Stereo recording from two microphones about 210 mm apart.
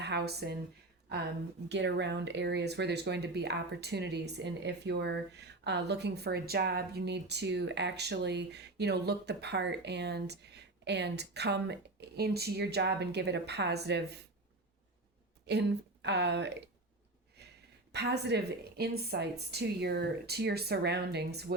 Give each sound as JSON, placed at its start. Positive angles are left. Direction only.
{"t": 0.0, "sound": "speech", "side_deg": -50}
{"t": 1.7, "sound": "a woman's voice", "side_deg": -55}
{"t": 15.4, "sound": "speech", "side_deg": -55}
{"t": 17.4, "sound": "a sound", "side_deg": -50}
{"t": 17.9, "sound": "a woman's voice", "side_deg": -55}